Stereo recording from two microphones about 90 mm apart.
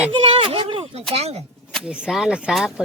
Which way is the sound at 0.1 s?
80° right.